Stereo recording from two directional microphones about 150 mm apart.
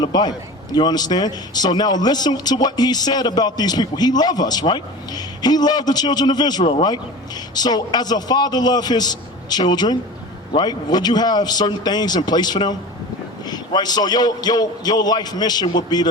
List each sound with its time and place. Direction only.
0.0 s a man's voice: 30° left (ahead or behind)